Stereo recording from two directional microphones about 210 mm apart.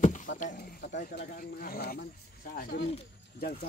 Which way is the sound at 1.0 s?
45° left (ahead or behind).